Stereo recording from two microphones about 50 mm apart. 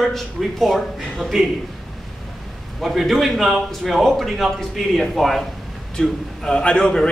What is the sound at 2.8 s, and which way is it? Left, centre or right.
Speech, centre.